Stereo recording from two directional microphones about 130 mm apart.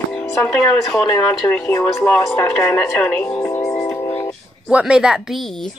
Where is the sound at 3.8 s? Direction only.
20° left (ahead or behind).